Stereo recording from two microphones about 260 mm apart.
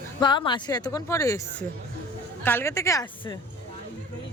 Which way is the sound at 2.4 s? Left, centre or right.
Centre.